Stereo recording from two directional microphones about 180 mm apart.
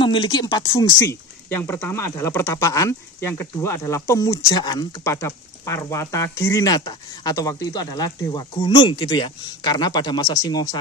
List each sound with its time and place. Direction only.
0.0 s speech: 25° left (ahead or behind)
1.5 s speech: 10° left (ahead or behind)